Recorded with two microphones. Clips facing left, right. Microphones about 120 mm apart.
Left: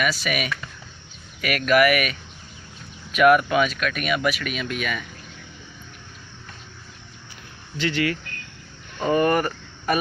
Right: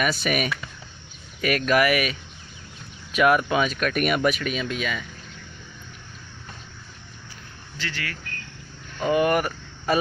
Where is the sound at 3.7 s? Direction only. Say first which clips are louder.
Right 2 dB; 40° right (ahead or behind).